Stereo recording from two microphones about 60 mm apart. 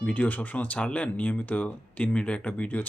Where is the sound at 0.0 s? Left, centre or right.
Left.